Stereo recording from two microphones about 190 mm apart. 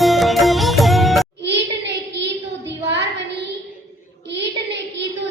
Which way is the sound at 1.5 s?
65° right (ahead or behind).